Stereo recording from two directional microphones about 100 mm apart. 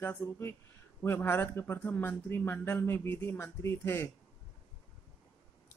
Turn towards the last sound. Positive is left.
turn(degrees=25)  # may be behind; listen again after turning